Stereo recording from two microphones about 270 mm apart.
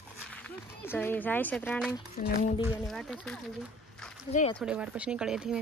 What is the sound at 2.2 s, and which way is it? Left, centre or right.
Speech, left.